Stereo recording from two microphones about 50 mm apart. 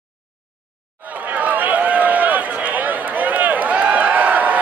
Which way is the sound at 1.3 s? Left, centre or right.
Right.